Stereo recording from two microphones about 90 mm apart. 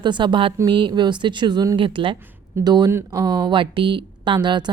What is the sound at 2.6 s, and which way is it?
A woman's voice, 50° right (ahead or behind).